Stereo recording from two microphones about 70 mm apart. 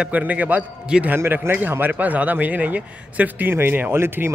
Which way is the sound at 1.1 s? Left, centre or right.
Right.